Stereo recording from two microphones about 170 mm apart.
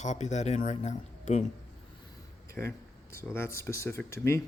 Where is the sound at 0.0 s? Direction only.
45° left (ahead or behind).